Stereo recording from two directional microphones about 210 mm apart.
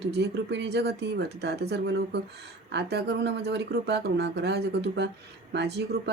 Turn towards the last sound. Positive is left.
turn(degrees=-55)  # may be behind; listen again after turning